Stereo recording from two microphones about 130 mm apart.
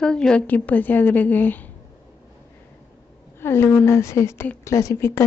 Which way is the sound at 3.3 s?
20° left (ahead or behind).